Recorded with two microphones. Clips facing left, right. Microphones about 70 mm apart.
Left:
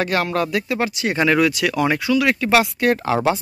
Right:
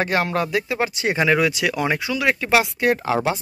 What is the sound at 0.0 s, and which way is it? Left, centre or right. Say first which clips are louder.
Speech: left 1 dB; right.